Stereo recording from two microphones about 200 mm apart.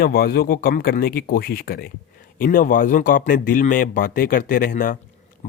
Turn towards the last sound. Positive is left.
turn(degrees=45)  # may be behind; listen again after turning